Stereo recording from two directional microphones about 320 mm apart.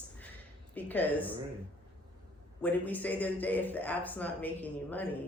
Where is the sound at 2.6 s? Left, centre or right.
Centre.